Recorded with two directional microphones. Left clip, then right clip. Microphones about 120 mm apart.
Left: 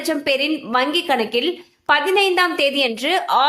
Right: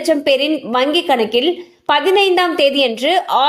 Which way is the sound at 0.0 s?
25° right (ahead or behind).